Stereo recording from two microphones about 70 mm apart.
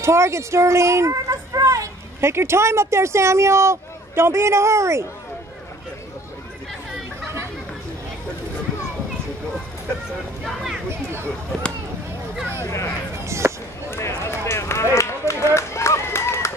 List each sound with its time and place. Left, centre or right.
0.0 s speech: right
2.1 s speech: right
10.4 s a sound: centre
12.6 s a sound: left
13.2 s chop: right
13.8 s run: left